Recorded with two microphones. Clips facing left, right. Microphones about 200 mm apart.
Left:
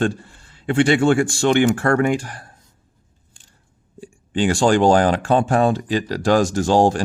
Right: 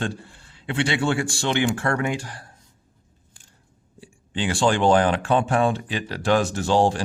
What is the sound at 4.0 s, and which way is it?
Speech, 45° left (ahead or behind).